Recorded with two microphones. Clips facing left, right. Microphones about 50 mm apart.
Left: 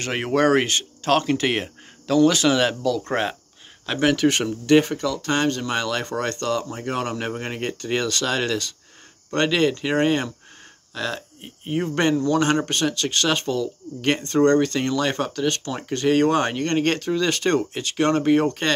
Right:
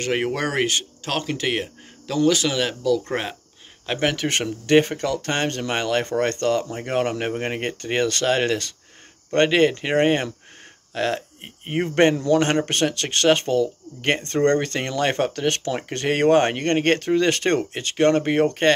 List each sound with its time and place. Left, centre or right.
0.1 s speech: centre
1.2 s speech: centre
3.8 s speech: centre
4.3 s speech: right